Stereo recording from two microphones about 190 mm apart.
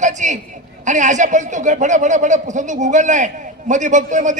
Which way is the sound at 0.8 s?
40° right (ahead or behind).